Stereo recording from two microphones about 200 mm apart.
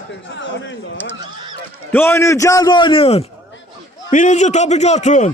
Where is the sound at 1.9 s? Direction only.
10° left (ahead or behind); by 5.3 s 35° left (ahead or behind).